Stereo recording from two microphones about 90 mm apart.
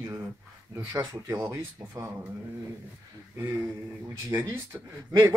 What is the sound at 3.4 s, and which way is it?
Speech, 30° right (ahead or behind).